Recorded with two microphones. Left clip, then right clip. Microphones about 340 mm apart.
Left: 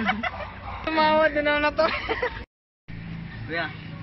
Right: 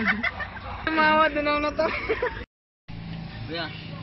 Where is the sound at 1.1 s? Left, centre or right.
Left.